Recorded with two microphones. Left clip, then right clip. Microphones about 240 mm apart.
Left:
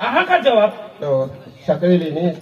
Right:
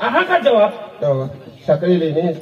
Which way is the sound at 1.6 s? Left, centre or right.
Left.